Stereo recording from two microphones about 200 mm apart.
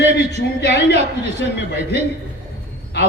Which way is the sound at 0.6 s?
60° left (ahead or behind).